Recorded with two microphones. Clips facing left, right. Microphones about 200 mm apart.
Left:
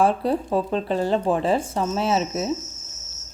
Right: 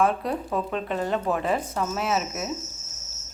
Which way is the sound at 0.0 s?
30° left (ahead or behind).